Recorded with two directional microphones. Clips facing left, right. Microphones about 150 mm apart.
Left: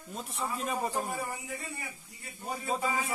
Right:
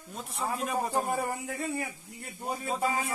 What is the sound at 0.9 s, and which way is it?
Speech, 45° right (ahead or behind).